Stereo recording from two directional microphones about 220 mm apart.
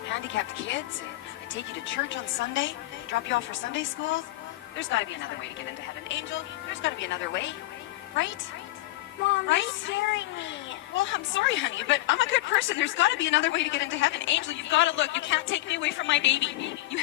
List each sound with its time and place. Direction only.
0.1 s speech: 55° left (ahead or behind)
9.3 s speech: 55° left (ahead or behind)